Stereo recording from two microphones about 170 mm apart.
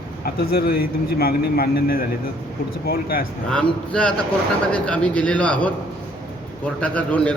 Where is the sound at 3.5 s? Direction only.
5° left (ahead or behind).